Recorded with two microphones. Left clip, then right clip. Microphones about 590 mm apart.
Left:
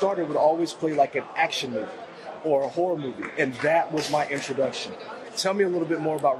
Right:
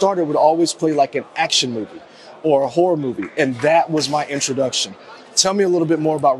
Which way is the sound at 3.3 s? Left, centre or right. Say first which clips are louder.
Right 7 dB; right.